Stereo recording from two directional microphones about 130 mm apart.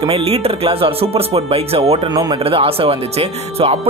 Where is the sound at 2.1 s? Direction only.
35° right (ahead or behind).